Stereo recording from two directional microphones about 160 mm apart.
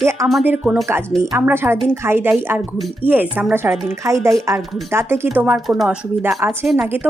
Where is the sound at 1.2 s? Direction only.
15° right (ahead or behind).